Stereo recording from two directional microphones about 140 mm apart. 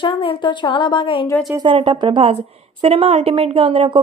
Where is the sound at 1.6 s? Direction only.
40° right (ahead or behind).